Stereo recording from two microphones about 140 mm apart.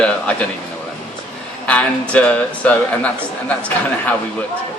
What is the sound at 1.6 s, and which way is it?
A man's voice, 10° left (ahead or behind).